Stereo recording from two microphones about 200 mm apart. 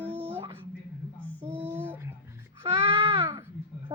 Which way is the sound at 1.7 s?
10° right (ahead or behind).